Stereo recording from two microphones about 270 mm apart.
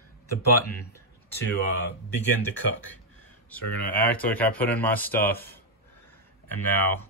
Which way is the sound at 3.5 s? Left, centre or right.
Centre.